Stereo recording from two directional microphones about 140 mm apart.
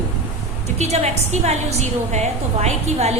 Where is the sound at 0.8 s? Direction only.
50° right (ahead or behind).